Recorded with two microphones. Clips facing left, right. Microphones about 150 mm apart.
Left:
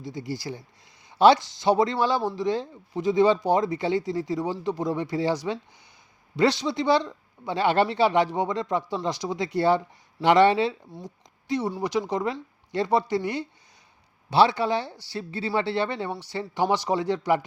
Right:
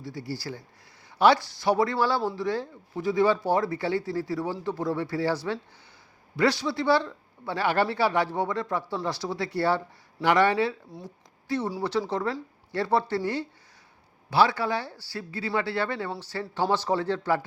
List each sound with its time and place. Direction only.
0.0 s speech: 20° left (ahead or behind)